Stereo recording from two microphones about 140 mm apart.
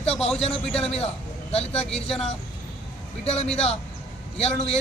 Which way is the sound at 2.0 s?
45° left (ahead or behind).